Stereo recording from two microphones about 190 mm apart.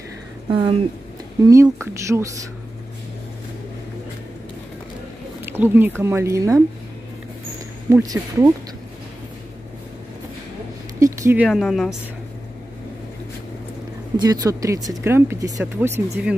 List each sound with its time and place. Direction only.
0.5 s speech: 30° right (ahead or behind)
1.4 s speech: 15° right (ahead or behind)
5.4 s speech: 10° right (ahead or behind)
7.9 s speech: 20° right (ahead or behind)
11.0 s speech: 15° right (ahead or behind); by 11.9 s centre (ahead or behind)
14.1 s speech: 20° right (ahead or behind)